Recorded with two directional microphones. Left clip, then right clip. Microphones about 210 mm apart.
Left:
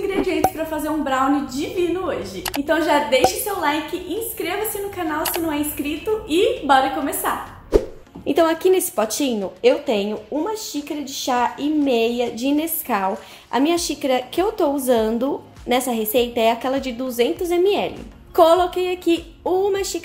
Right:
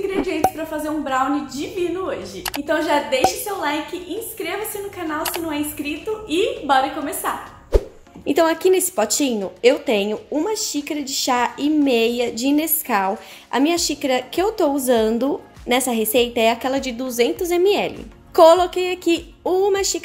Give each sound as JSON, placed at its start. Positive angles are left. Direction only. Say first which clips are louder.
{"t": 0.1, "sound": "a woman's voice", "louder": "left 2 dB", "side_deg": 0}
{"t": 8.3, "sound": "a woman's voice", "louder": "even", "side_deg": -15}